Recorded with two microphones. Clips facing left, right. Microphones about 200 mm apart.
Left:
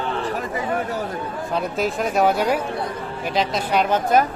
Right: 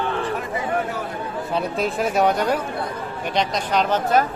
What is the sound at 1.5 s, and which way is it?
Speech, centre (ahead or behind).